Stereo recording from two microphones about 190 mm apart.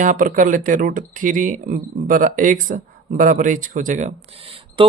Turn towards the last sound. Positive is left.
turn(degrees=-30)  # may be behind; listen again after turning